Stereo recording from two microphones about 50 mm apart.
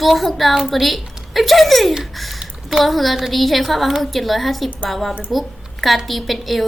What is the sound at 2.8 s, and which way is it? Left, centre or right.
A woman's voice, centre.